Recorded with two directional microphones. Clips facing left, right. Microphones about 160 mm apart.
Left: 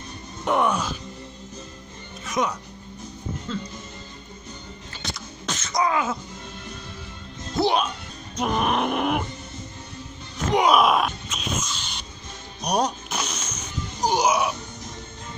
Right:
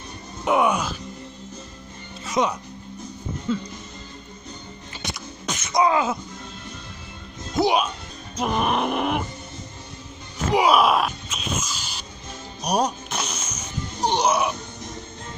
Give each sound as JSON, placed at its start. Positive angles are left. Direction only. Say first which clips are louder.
{"t": 0.5, "sound": "speech", "louder": "right 2 dB", "side_deg": -10}
{"t": 2.2, "sound": "music", "louder": "right 3 dB", "side_deg": -30}
{"t": 3.5, "sound": "speech", "louder": "right 6 dB", "side_deg": -10}
{"t": 5.7, "sound": "groan", "louder": "right 4 dB", "side_deg": -25}
{"t": 7.5, "sound": "speech", "louder": "right 1 dB", "side_deg": -10}
{"t": 8.4, "sound": "a sound", "louder": "even", "side_deg": 0}
{"t": 10.5, "sound": "a sound", "louder": "right 1 dB", "side_deg": -5}
{"t": 12.6, "sound": "music", "louder": "right 1 dB", "side_deg": -5}
{"t": 14.1, "sound": "speech", "louder": "even", "side_deg": 0}